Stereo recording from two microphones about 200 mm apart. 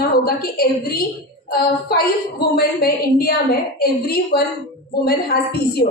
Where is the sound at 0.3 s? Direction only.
50° left (ahead or behind).